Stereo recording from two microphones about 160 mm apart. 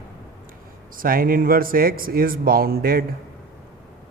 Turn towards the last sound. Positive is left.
turn(degrees=-70)  # may be behind; listen again after turning